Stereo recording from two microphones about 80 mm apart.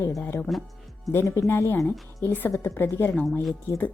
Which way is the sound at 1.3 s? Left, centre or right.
Left.